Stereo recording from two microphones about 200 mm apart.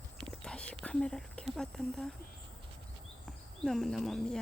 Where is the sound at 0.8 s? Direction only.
5° left (ahead or behind).